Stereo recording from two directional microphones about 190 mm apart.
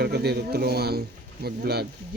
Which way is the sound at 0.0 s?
60° right (ahead or behind).